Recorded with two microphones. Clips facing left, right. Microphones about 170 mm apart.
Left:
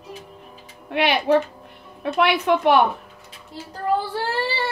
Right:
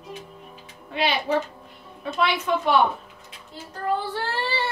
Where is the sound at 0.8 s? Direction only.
65° left (ahead or behind).